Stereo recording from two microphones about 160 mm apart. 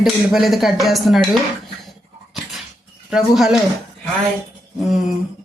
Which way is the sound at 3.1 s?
Centre (ahead or behind).